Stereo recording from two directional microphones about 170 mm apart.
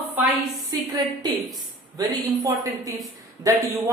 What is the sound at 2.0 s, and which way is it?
Speech, 20° right (ahead or behind).